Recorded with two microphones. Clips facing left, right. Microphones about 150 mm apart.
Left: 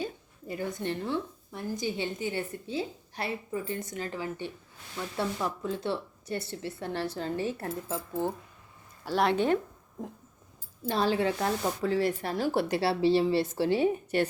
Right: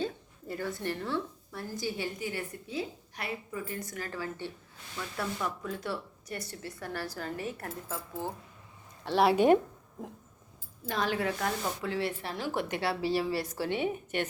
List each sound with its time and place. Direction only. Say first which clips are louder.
0.0 s a woman's voice: right 1 dB; 15° left (ahead or behind)
9.0 s speech: right 3 dB; 5° right (ahead or behind)
10.8 s a woman's voice: left 4 dB; 30° left (ahead or behind)
11.8 s a woman's voice: left 5 dB; 40° left (ahead or behind)